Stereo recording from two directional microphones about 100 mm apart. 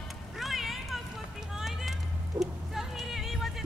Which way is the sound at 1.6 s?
5° right (ahead or behind).